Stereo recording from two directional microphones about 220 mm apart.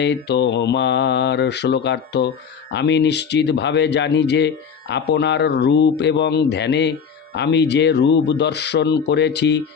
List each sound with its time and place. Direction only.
0.0 s speech: 50° left (ahead or behind)